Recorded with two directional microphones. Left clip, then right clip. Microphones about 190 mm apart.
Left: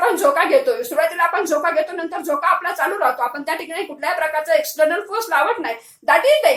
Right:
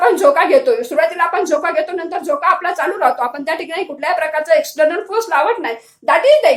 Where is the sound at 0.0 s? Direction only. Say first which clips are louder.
Right 5 dB; 40° right (ahead or behind).